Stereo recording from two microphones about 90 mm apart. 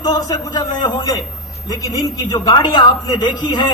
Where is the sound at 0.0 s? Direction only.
45° left (ahead or behind).